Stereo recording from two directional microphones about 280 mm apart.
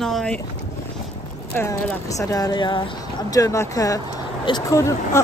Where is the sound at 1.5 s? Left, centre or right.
Centre.